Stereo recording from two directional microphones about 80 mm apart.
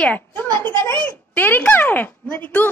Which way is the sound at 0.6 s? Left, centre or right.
Right.